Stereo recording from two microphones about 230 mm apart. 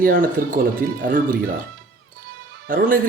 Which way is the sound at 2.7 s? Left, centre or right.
Right.